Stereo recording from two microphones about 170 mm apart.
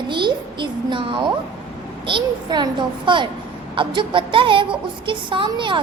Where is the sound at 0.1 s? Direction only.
25° right (ahead or behind).